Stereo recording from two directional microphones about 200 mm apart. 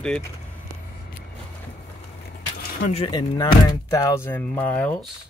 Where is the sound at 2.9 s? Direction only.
25° left (ahead or behind); by 5.1 s 5° left (ahead or behind).